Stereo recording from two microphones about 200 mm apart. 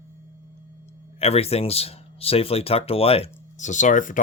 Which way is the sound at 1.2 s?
30° left (ahead or behind).